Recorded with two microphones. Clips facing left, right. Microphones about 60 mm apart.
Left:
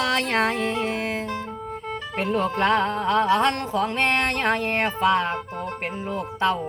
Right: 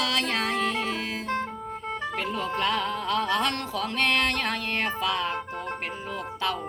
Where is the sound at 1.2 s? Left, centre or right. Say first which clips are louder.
Right 1 dB; right.